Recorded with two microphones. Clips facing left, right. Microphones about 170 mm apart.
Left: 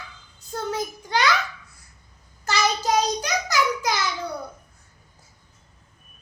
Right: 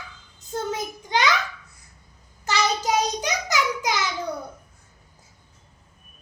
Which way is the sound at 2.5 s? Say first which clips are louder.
Even; 20° right (ahead or behind).